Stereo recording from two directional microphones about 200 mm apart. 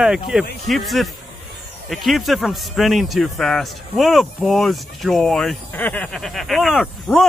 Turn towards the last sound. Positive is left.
turn(degrees=0)  # may be behind; listen again after turning